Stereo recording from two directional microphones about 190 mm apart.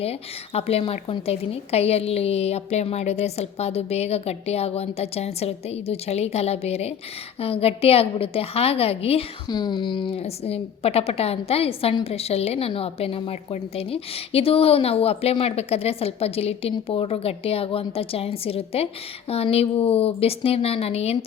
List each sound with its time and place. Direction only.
0.0 s a woman's voice: 30° left (ahead or behind)